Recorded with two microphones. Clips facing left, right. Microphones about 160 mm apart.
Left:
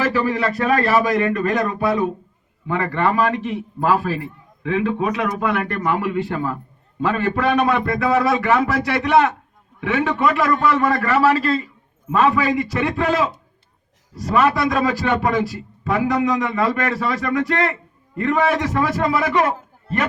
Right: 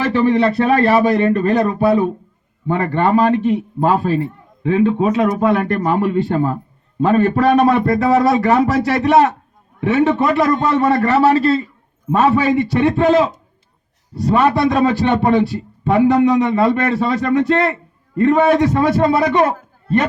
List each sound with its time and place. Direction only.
0.1 s a man's voice: 30° right (ahead or behind)
10.5 s a man's voice: 20° right (ahead or behind)
14.3 s a man's voice: 30° right (ahead or behind)